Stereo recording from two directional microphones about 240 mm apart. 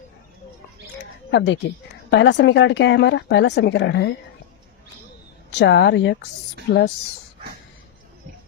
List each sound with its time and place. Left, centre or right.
1.3 s speech: left
5.5 s speech: left